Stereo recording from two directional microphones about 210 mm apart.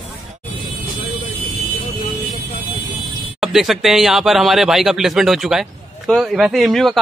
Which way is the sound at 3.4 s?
Centre (ahead or behind).